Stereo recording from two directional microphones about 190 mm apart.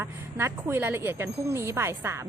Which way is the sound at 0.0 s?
15° right (ahead or behind).